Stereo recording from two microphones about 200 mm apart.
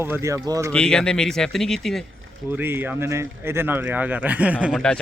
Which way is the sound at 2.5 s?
10° right (ahead or behind).